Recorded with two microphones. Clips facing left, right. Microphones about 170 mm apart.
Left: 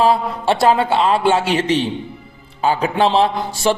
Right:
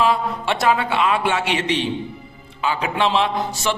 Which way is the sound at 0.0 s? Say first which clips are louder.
Left 4 dB; 35° left (ahead or behind).